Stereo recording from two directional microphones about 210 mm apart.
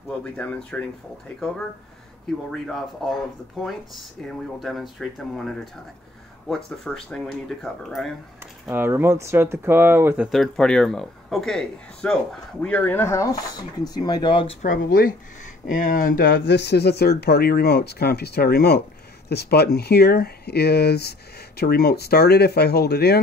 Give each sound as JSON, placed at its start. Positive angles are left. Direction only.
{"t": 0.2, "sound": "speech", "side_deg": 5}
{"t": 2.5, "sound": "speech", "side_deg": 0}
{"t": 6.5, "sound": "speech", "side_deg": 5}
{"t": 8.6, "sound": "speech", "side_deg": -10}